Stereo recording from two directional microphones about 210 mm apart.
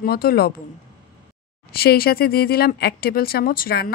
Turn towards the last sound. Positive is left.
turn(degrees=45)  # may be behind; listen again after turning